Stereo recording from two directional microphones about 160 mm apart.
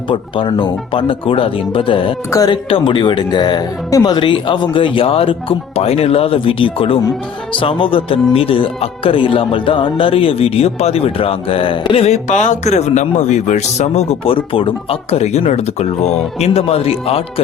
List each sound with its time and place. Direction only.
0.1 s speech: 30° left (ahead or behind)
2.3 s speech: 25° left (ahead or behind)
2.6 s speech: 35° left (ahead or behind)